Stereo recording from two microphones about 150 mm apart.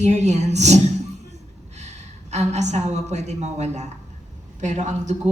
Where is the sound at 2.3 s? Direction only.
50° right (ahead or behind).